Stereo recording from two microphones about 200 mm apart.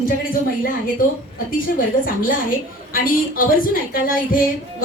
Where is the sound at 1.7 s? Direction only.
45° left (ahead or behind).